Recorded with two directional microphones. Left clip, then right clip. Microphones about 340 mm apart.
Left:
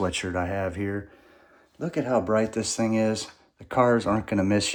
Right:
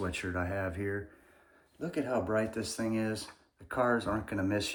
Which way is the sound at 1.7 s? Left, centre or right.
Left.